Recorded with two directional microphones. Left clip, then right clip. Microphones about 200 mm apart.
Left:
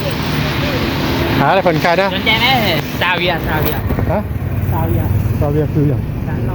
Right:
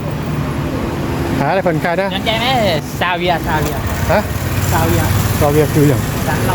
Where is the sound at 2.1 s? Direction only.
60° right (ahead or behind).